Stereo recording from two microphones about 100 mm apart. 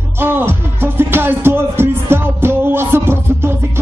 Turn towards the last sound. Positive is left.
turn(degrees=-25)  # may be behind; listen again after turning